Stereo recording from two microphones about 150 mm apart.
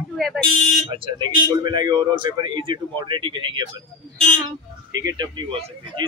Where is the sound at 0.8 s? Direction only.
35° right (ahead or behind).